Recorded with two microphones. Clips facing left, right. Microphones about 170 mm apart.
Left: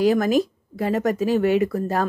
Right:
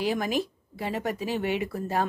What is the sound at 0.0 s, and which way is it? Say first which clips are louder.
Speech: left 9 dB; 40° left (ahead or behind).